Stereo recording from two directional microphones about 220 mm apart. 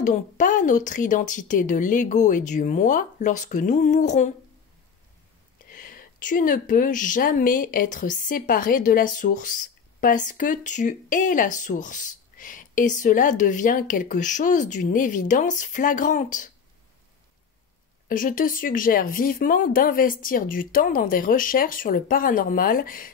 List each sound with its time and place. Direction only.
0.0 s speech: 35° left (ahead or behind)
5.8 s speech: 40° left (ahead or behind)
18.0 s speech: 40° left (ahead or behind)